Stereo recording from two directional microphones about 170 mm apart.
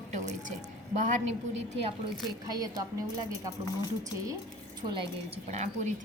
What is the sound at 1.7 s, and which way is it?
Speech, 35° right (ahead or behind).